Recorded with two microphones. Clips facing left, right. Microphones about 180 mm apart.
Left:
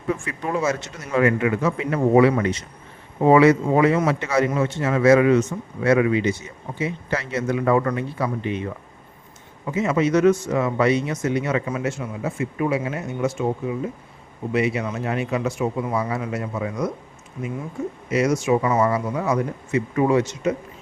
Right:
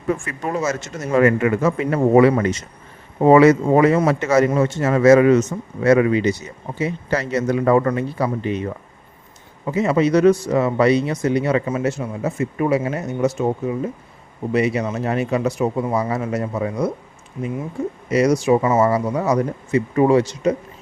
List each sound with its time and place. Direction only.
0.1 s a man's voice: 45° right (ahead or behind)
9.7 s speech: 35° right (ahead or behind)
18.1 s speech: 35° right (ahead or behind)